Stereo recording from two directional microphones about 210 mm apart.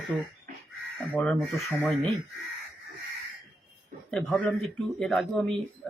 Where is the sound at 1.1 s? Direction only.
5° left (ahead or behind).